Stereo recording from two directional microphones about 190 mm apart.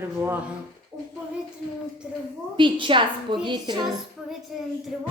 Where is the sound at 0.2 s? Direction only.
10° right (ahead or behind).